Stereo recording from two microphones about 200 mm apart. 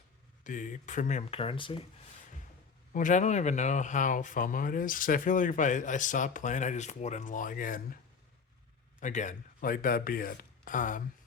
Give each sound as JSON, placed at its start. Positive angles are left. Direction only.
{"t": 0.4, "sound": "speech", "side_deg": 40}
{"t": 2.9, "sound": "speech", "side_deg": 40}
{"t": 9.0, "sound": "speech", "side_deg": 40}